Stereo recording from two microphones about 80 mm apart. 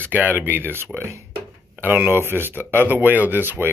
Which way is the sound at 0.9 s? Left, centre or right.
Right.